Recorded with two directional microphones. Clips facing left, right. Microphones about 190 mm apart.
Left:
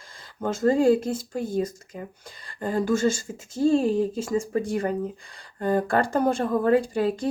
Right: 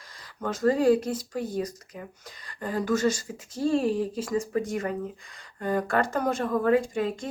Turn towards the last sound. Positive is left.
turn(degrees=35)  # may be behind; listen again after turning